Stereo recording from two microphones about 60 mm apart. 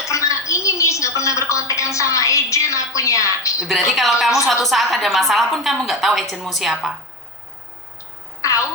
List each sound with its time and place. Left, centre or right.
0.1 s a woman's voice: left
3.7 s a woman's voice: centre
8.4 s a sound: left